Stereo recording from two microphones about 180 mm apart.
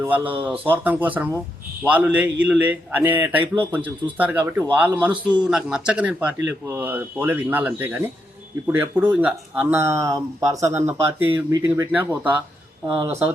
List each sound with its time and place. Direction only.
0.0 s a man's voice: 10° right (ahead or behind)
5.1 s a man's voice: 25° right (ahead or behind)
5.5 s a man's voice: 5° right (ahead or behind)